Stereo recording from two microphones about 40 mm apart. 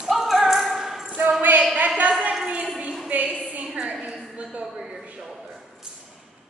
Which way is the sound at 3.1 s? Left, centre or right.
Right.